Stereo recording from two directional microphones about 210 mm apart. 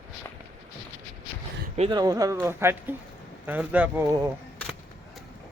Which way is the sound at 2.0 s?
20° right (ahead or behind).